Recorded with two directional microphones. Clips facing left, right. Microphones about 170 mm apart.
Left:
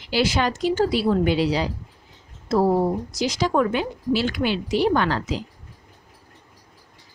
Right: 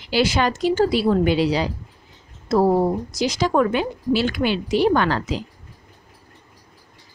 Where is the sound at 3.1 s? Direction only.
55° right (ahead or behind).